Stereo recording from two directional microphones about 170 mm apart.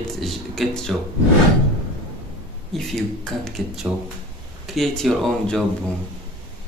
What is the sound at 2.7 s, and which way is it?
Speech, centre (ahead or behind).